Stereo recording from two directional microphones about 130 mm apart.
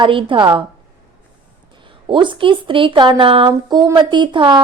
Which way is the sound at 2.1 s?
40° right (ahead or behind).